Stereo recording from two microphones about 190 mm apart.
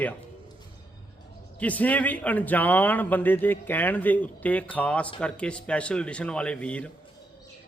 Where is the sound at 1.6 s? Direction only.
10° left (ahead or behind).